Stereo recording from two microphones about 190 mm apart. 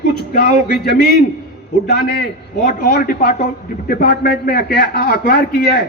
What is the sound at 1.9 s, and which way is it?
A man's voice, 55° left (ahead or behind).